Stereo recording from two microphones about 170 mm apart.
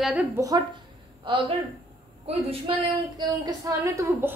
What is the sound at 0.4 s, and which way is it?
Speech, 20° right (ahead or behind).